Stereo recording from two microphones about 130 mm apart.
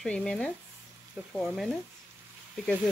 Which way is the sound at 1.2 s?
10° right (ahead or behind).